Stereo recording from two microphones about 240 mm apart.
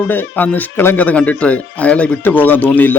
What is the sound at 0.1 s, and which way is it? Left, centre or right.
Speech, centre.